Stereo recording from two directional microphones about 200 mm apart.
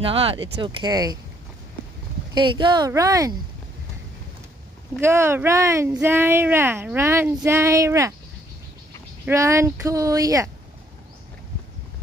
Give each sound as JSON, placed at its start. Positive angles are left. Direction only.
{"t": 0.0, "sound": "speech", "side_deg": -30}
{"t": 2.3, "sound": "speech", "side_deg": -25}
{"t": 5.0, "sound": "speech", "side_deg": -10}
{"t": 9.2, "sound": "speech", "side_deg": -15}